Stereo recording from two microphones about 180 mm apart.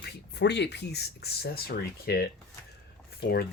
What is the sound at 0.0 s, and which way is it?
Speech, 70° left (ahead or behind).